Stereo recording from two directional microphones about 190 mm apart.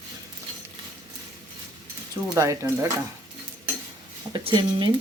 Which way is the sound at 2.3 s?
15° right (ahead or behind).